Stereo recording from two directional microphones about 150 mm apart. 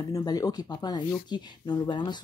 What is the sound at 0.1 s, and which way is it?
Speech, 25° left (ahead or behind).